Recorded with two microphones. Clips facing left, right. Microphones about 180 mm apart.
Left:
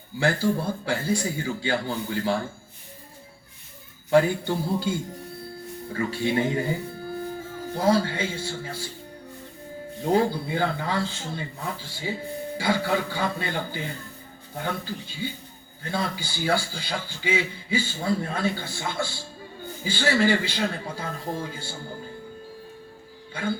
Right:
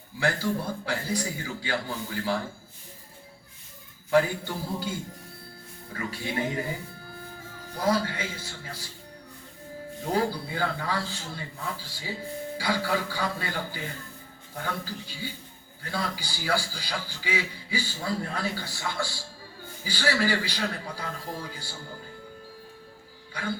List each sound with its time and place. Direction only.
0.2 s a man's voice: 30° left (ahead or behind)
4.1 s a man's voice: 25° left (ahead or behind)
10.1 s a man's voice: 25° left (ahead or behind)
23.3 s a man's voice: 25° left (ahead or behind)